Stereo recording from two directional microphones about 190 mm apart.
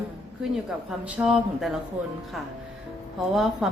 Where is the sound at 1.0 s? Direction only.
5° right (ahead or behind).